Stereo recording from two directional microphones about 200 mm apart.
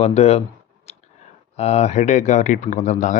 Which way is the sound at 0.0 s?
30° left (ahead or behind).